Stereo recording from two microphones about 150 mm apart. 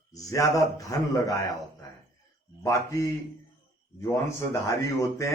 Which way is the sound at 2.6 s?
20° left (ahead or behind).